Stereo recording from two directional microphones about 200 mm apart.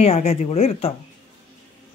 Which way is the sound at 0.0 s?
35° left (ahead or behind).